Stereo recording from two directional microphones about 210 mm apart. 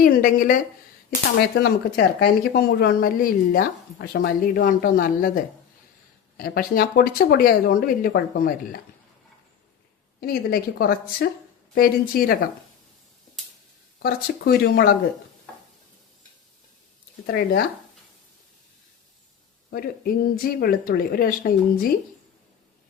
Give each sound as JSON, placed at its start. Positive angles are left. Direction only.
{"t": 0.0, "sound": "a woman's voice", "side_deg": 45}
{"t": 10.2, "sound": "a woman's voice", "side_deg": 45}
{"t": 14.0, "sound": "a woman's voice", "side_deg": 45}
{"t": 17.2, "sound": "a woman's voice", "side_deg": 45}
{"t": 19.7, "sound": "a woman's voice", "side_deg": 45}